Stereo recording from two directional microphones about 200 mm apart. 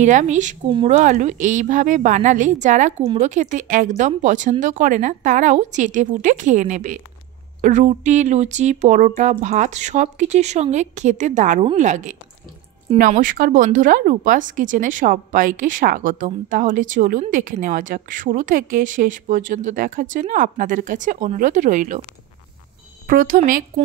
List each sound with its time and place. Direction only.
0.0 s speech: 35° right (ahead or behind)
23.0 s speech: 45° right (ahead or behind)